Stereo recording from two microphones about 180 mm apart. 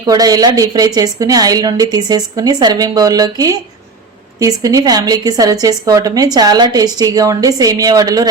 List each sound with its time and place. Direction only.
0.1 s a woman's voice: 20° right (ahead or behind)